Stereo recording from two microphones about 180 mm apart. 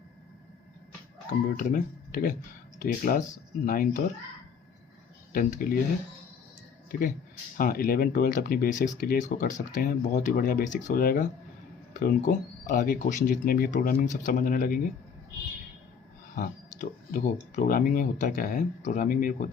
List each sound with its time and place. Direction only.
1.5 s speech: 50° left (ahead or behind)
5.3 s speech: 50° left (ahead or behind)
7.5 s speech: 50° left (ahead or behind)
16.3 s speech: 50° left (ahead or behind)